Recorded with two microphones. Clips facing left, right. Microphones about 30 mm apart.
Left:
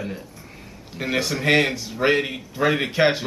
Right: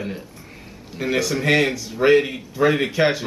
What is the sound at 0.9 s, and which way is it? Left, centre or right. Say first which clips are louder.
Speech: right 2 dB; centre.